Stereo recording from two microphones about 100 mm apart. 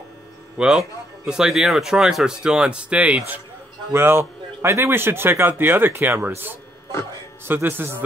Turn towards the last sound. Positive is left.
turn(degrees=-20)  # may be behind; listen again after turning